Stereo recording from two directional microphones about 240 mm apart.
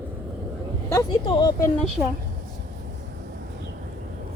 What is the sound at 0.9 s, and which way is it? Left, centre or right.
Speech, centre.